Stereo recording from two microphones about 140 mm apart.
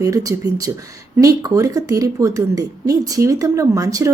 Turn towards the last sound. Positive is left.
turn(degrees=-25)  # may be behind; listen again after turning